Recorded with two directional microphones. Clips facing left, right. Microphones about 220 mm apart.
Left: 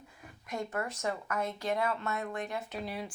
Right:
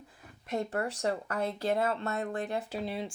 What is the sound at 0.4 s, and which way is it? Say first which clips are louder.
Speech: right 4 dB; 35° right (ahead or behind).